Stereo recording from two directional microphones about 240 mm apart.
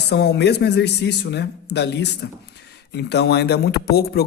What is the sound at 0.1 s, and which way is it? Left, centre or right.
Speech, left.